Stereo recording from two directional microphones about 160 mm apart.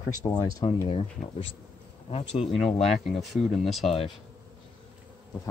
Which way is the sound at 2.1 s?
40° left (ahead or behind).